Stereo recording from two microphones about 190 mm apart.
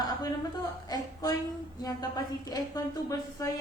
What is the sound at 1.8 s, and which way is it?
A woman's voice, 20° left (ahead or behind).